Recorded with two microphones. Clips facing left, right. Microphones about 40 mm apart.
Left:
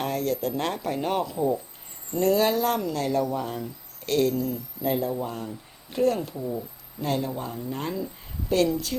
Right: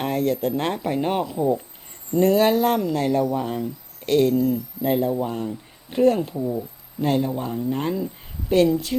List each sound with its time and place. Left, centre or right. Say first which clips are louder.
0.0 s speech: right 4 dB; right
1.2 s speech: right 3 dB; centre
2.1 s speech: right 5 dB; right
6.3 s speech: right 5 dB; centre
7.0 s speech: right 6 dB; right
8.9 s speech: right 6 dB; centre